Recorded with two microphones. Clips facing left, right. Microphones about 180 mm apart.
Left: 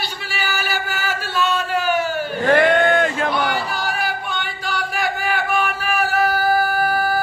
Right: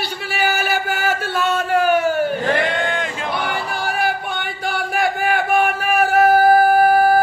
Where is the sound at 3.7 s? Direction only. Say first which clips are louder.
Right 3 dB; 50° right (ahead or behind).